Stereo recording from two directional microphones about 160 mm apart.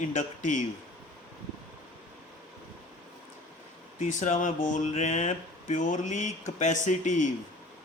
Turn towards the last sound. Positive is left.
turn(degrees=50)  # may be behind; listen again after turning